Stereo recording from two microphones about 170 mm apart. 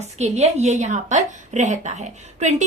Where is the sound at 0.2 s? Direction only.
40° right (ahead or behind).